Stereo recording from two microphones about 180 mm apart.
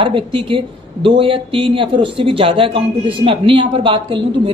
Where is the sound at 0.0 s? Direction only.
30° right (ahead or behind).